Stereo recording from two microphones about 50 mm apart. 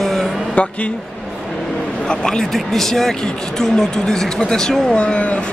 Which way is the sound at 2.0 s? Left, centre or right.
Centre.